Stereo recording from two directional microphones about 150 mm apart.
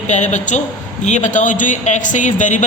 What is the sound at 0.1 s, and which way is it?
Speech, 55° left (ahead or behind).